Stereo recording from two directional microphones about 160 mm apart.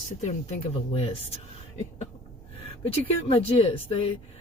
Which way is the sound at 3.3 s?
35° left (ahead or behind).